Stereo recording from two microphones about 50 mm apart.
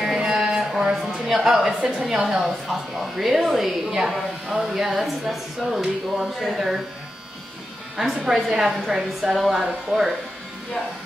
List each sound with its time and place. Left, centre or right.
0.0 s a sound: centre
1.1 s a woman's voice: centre
8.0 s a woman's voice: centre